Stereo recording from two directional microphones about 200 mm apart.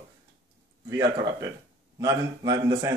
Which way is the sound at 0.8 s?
20° right (ahead or behind).